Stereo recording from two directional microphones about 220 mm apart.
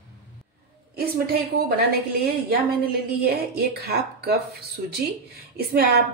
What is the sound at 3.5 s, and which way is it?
Speech, 45° right (ahead or behind).